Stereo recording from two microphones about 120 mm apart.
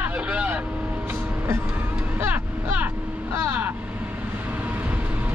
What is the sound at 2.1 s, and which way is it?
Vehicle, 15° right (ahead or behind).